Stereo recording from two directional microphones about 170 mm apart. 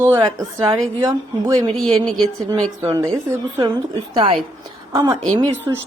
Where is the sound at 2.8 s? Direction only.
20° right (ahead or behind).